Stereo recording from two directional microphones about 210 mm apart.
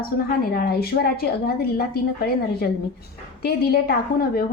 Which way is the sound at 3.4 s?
50° left (ahead or behind).